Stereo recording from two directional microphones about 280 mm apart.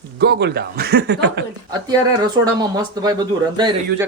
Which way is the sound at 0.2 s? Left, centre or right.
Right.